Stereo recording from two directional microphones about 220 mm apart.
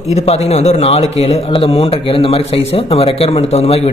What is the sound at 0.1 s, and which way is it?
A man's voice, 30° left (ahead or behind).